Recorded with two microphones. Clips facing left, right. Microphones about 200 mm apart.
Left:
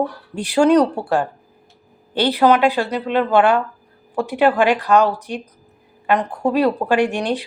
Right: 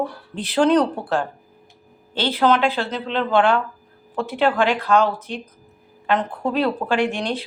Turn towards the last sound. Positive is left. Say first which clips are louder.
# left 3 dB
turn(degrees=15)  # may be behind; listen again after turning